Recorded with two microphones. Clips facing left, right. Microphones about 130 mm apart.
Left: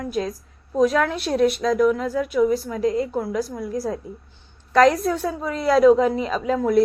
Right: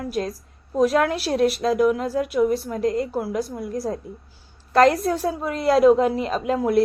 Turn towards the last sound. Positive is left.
turn(degrees=-5)  # may be behind; listen again after turning